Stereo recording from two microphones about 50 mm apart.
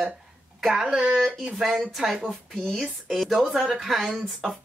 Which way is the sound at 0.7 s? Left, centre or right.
Centre.